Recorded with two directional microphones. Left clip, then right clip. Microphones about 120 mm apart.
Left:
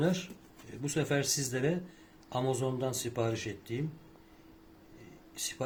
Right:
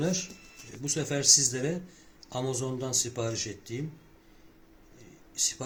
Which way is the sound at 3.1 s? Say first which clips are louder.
Right 1 dB; 15° left (ahead or behind).